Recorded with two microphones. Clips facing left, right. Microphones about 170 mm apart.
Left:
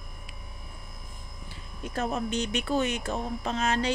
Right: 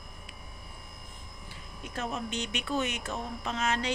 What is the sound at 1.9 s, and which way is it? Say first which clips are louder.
Speech: left 5 dB; 40° left (ahead or behind).